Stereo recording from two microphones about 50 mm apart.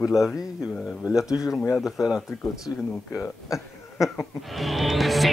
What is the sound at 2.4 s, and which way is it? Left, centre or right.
Speech, left.